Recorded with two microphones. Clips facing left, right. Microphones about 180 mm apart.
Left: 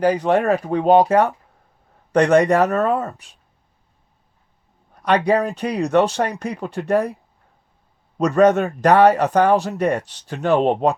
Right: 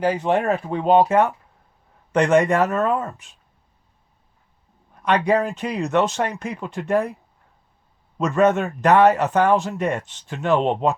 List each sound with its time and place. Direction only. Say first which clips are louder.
0.0 s speech: left 3 dB; 40° left (ahead or behind)
4.9 s speech: left 2 dB; 35° left (ahead or behind)
8.2 s speech: left 3 dB; 35° left (ahead or behind)